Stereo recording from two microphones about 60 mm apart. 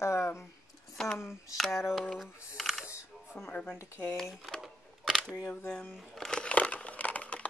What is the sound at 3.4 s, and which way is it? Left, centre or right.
Speech, centre.